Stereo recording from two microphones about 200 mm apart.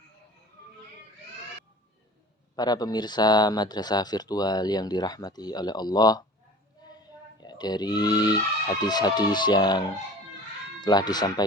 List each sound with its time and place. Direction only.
2.6 s speech: 20° left (ahead or behind)
7.3 s speech: 20° left (ahead or behind)